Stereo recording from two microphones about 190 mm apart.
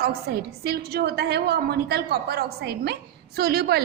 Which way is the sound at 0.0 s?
55° right (ahead or behind).